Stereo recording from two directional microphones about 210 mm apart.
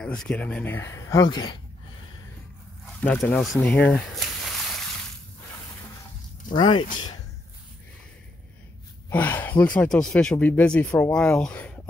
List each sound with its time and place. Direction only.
0.0 s speech: 5° left (ahead or behind); by 1.6 s 20° left (ahead or behind)
3.0 s speech: 5° left (ahead or behind)
6.5 s speech: 20° left (ahead or behind)
9.1 s speech: 10° left (ahead or behind)